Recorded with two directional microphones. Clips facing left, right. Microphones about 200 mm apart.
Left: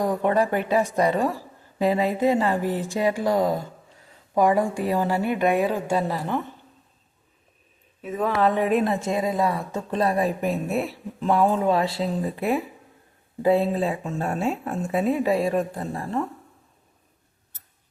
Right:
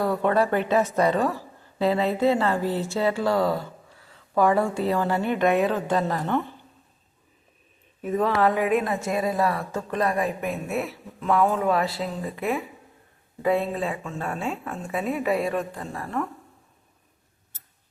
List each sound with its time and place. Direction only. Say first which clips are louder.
0.0 s a woman's voice: even; 15° left (ahead or behind)
8.2 s a woman's voice: left 1 dB; 15° left (ahead or behind); by 10.5 s 35° left (ahead or behind)
10.5 s a woman's voice: left 3 dB; centre (ahead or behind)
10.8 s a woman's voice: left 2 dB; 30° left (ahead or behind)